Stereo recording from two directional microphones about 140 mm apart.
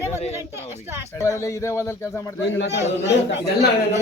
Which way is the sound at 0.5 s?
15° right (ahead or behind).